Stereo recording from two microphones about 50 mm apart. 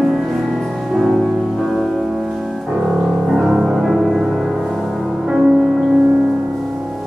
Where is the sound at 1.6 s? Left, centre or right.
Centre.